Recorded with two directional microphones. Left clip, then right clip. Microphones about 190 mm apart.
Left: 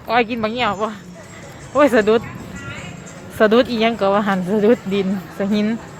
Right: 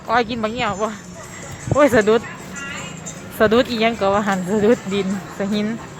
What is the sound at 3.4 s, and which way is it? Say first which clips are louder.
Speech: left 1 dB; 10° left (ahead or behind).